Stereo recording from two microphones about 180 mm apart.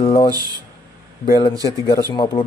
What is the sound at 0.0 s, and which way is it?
Speech, 30° left (ahead or behind).